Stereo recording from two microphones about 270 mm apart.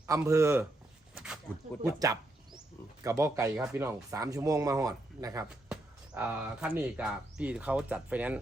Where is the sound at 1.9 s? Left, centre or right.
Centre.